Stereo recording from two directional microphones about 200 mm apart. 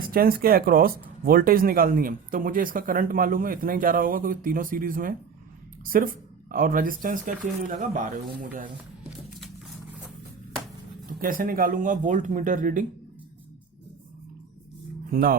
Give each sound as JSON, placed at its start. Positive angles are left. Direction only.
{"t": 0.1, "sound": "speech", "side_deg": -45}
{"t": 11.2, "sound": "speech", "side_deg": -45}
{"t": 15.1, "sound": "speech", "side_deg": -45}